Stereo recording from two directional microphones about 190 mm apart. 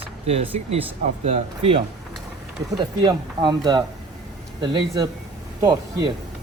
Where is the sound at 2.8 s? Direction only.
25° right (ahead or behind).